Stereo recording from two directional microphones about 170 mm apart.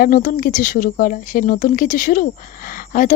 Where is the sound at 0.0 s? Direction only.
55° left (ahead or behind).